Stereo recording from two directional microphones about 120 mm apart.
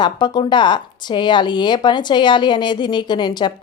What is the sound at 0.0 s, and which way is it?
A woman's voice, 35° left (ahead or behind).